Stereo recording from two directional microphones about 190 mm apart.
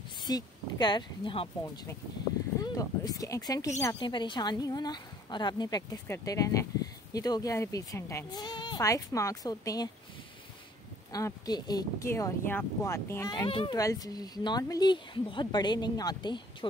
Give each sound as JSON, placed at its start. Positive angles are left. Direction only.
{"t": 0.3, "sound": "speech", "side_deg": 20}
{"t": 2.6, "sound": "speech", "side_deg": 20}
{"t": 11.1, "sound": "speech", "side_deg": 20}